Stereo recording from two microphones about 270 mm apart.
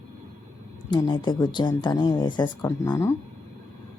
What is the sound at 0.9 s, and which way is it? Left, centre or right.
Speech, centre.